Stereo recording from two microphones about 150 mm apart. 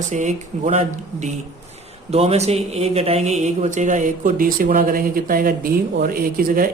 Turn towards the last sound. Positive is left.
turn(degrees=-75)  # may be behind; listen again after turning